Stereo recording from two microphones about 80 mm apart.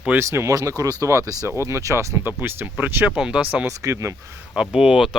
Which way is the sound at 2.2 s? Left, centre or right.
Right.